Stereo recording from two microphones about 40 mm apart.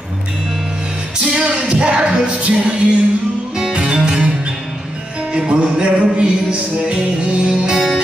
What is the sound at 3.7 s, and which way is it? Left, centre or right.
Music, right.